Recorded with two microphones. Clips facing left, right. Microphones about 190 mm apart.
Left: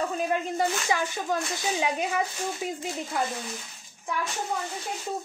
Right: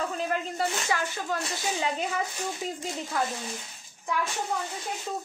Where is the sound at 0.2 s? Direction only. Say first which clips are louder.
Left 4 dB; 15° left (ahead or behind).